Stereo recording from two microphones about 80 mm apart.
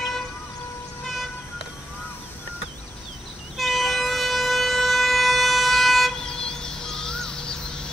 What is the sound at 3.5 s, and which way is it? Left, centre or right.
Train, centre.